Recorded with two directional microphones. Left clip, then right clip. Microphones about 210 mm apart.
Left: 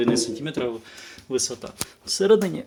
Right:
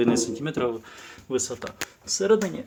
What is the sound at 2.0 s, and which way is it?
Speech, 20° left (ahead or behind).